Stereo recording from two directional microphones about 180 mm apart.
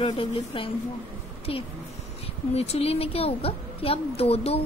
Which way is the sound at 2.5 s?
35° left (ahead or behind).